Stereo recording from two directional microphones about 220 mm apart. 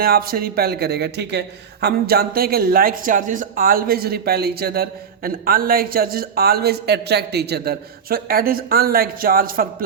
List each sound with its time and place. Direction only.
0.0 s speech: 40° right (ahead or behind)